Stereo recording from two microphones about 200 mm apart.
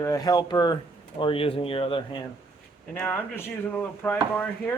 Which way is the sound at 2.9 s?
10° left (ahead or behind).